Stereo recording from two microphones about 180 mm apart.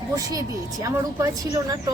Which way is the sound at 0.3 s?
20° right (ahead or behind).